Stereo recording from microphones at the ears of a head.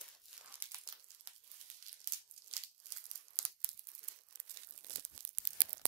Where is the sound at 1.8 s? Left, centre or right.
Right.